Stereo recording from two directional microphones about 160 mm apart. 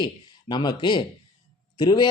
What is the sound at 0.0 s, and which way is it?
A man's voice, 25° left (ahead or behind).